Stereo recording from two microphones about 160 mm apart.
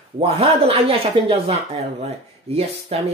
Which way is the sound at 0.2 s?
35° right (ahead or behind).